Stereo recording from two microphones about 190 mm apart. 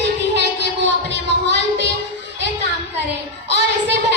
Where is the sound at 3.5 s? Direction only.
65° right (ahead or behind).